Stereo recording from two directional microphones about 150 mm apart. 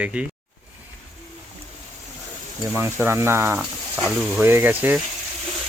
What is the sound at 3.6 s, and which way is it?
Speech, 5° right (ahead or behind).